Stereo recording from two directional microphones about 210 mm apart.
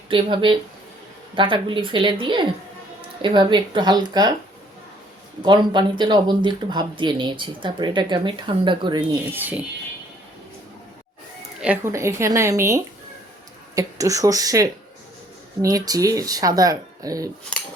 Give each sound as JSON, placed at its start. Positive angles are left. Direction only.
{"t": 0.1, "sound": "speech", "side_deg": -25}
{"t": 5.4, "sound": "speech", "side_deg": -20}
{"t": 9.3, "sound": "speech", "side_deg": -10}
{"t": 11.6, "sound": "speech", "side_deg": -10}